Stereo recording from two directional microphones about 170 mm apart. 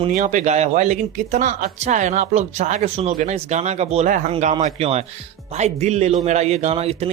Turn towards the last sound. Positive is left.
turn(degrees=-35)  # may be behind; listen again after turning